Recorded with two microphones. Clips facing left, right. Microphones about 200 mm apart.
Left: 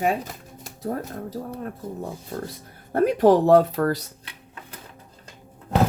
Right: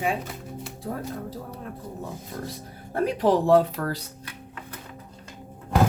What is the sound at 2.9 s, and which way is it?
Speech, 50° left (ahead or behind).